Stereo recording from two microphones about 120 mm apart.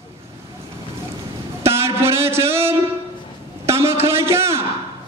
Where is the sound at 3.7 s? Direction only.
20° right (ahead or behind).